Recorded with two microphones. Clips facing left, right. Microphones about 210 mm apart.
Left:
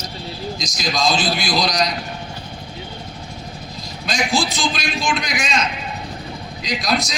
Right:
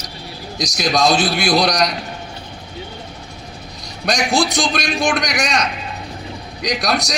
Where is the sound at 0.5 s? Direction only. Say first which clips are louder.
Right 8 dB; 65° right (ahead or behind).